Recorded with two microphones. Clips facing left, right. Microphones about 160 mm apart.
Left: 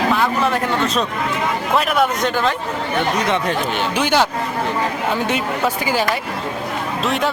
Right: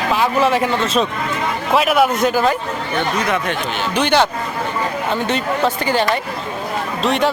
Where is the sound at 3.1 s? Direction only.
20° left (ahead or behind).